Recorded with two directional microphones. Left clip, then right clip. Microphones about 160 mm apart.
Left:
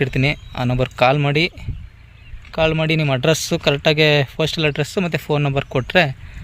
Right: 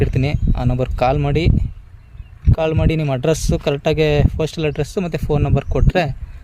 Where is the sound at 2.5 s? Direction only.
5° right (ahead or behind).